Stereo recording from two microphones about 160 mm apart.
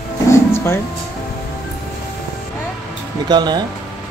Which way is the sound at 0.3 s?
15° left (ahead or behind).